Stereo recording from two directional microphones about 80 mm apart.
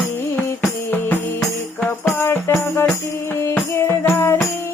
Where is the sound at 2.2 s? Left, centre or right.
Left.